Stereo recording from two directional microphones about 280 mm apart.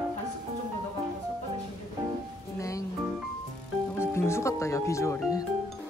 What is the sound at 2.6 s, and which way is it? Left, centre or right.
Music, centre.